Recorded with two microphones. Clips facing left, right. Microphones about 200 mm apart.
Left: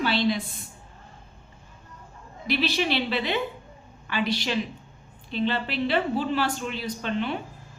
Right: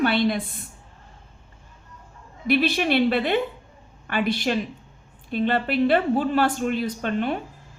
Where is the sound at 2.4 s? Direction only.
55° right (ahead or behind).